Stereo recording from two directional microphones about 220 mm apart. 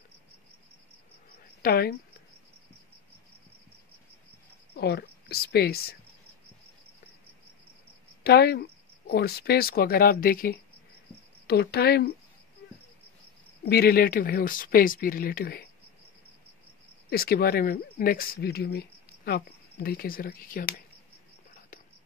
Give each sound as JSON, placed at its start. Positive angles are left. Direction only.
{"t": 1.6, "sound": "a woman's voice", "side_deg": 45}
{"t": 4.7, "sound": "speech", "side_deg": 45}
{"t": 8.2, "sound": "speech", "side_deg": 45}
{"t": 13.7, "sound": "speech", "side_deg": 45}
{"t": 17.1, "sound": "speech", "side_deg": 45}